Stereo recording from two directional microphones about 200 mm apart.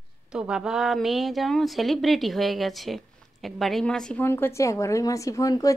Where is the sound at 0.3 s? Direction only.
5° right (ahead or behind).